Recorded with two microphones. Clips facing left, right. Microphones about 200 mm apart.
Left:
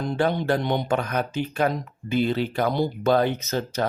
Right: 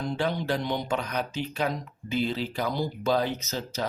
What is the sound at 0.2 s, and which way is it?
Speech, 55° left (ahead or behind).